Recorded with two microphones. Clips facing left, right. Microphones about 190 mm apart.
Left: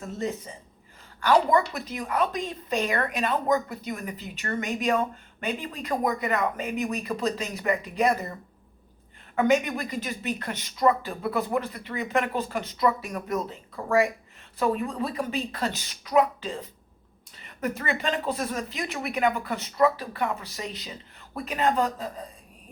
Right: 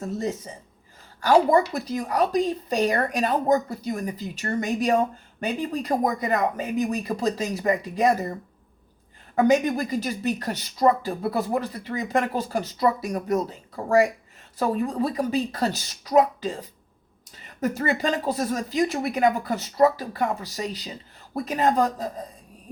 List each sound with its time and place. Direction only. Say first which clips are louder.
1.2 s speech: right 3 dB; 35° right (ahead or behind)